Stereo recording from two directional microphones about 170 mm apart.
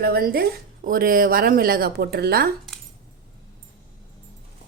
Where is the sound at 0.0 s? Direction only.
65° right (ahead or behind).